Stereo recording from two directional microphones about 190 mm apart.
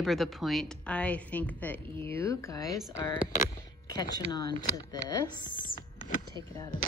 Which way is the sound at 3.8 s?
20° left (ahead or behind).